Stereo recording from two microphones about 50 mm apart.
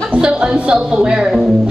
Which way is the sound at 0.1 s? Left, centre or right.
Centre.